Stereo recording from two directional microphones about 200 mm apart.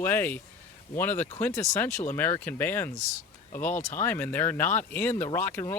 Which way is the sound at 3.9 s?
10° left (ahead or behind).